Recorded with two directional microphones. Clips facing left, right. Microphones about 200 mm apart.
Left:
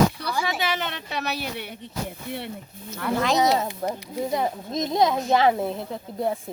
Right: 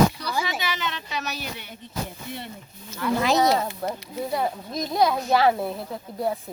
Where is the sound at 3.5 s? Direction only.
20° left (ahead or behind).